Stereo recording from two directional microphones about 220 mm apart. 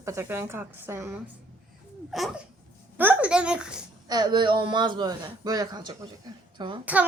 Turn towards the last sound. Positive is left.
turn(degrees=-20)  # may be behind; listen again after turning